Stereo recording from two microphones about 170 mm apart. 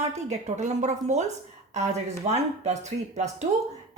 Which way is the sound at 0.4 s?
40° right (ahead or behind).